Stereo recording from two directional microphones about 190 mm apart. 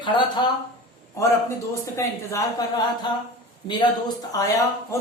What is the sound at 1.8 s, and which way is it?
A woman's voice, 15° left (ahead or behind).